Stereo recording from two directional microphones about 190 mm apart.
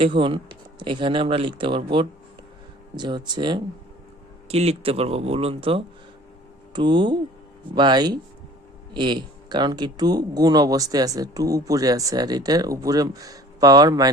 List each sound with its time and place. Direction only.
0.0 s speech: 25° right (ahead or behind)